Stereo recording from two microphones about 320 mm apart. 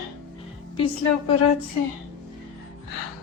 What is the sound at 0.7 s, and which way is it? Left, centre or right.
Speech, centre.